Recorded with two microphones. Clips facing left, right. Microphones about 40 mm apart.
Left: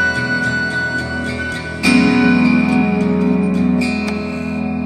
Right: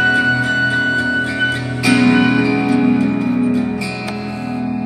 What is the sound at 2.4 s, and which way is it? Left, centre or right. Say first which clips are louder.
Music: left 2 dB; centre.